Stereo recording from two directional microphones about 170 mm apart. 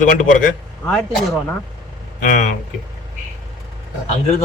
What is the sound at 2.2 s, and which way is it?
Speech, 50° left (ahead or behind).